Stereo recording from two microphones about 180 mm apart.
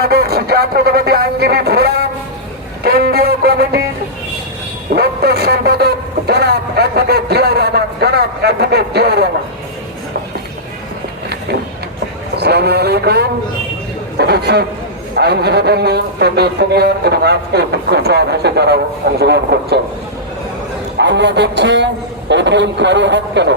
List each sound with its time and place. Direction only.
0.0 s speech: 60° right (ahead or behind)
2.8 s music: 60° right (ahead or behind)
4.9 s a sound: 60° right (ahead or behind)
12.4 s a man's voice: 65° right (ahead or behind)
21.0 s a man's voice: 75° right (ahead or behind)